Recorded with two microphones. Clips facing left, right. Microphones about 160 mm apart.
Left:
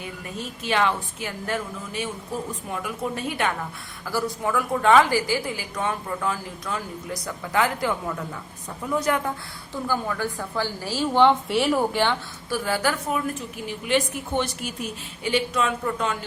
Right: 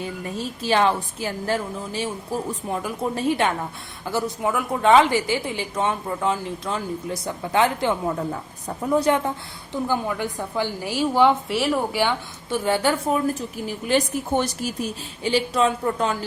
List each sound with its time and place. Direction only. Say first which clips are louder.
0.0 s a woman's voice: right 5 dB; 30° right (ahead or behind)
8.3 s a woman's voice: right 6 dB; 35° right (ahead or behind); by 12.1 s 5° right (ahead or behind)
12.5 s a woman's voice: right 3 dB; 25° right (ahead or behind)